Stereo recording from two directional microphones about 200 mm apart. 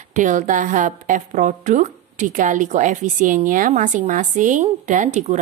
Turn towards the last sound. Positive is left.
turn(degrees=-35)  # may be behind; listen again after turning